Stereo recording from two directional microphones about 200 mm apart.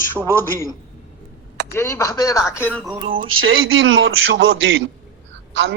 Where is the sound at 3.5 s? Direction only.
85° right.